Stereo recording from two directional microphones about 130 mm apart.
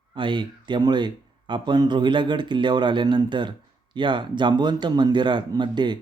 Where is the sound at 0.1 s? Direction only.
40° right (ahead or behind).